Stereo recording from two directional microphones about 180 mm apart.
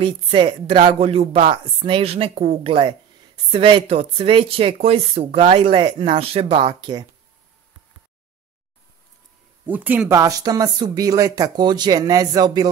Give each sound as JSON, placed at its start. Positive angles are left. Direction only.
{"t": 0.0, "sound": "a woman's voice", "side_deg": -25}
{"t": 9.7, "sound": "speech", "side_deg": -10}